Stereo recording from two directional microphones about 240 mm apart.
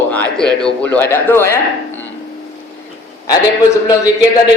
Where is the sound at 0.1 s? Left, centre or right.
Centre.